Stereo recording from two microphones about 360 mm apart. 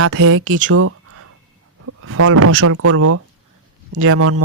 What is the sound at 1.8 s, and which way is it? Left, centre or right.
Speech, right.